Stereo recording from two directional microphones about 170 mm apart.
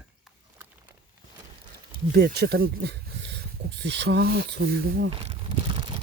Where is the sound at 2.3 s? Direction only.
65° right (ahead or behind).